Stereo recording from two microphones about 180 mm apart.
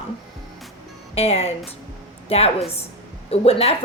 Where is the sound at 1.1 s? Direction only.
35° left (ahead or behind).